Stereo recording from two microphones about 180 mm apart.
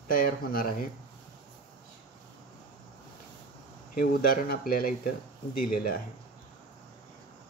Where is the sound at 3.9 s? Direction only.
55° left (ahead or behind).